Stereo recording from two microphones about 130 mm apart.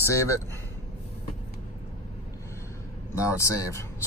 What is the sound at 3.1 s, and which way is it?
Speech, 25° left (ahead or behind).